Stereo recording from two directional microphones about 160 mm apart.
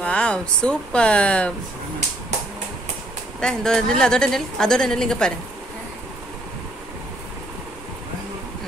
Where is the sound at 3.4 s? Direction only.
5° left (ahead or behind).